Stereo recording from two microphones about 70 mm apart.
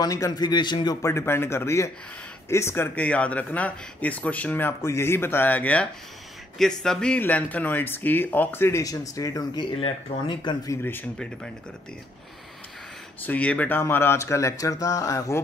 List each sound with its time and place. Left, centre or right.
0.0 s a man's voice: left
1.0 s speech: left
3.0 s speech: centre
4.8 s speech: left
6.6 s speech: centre
7.2 s speech: left
8.8 s speech: left
10.8 s speech: left
13.2 s speech: left
13.7 s speech: left